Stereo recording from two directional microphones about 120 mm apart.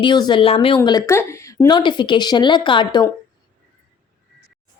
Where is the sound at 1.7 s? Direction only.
40° left (ahead or behind).